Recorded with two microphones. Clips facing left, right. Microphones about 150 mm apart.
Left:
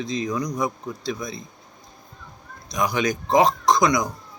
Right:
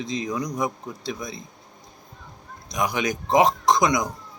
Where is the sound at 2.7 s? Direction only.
15° right (ahead or behind).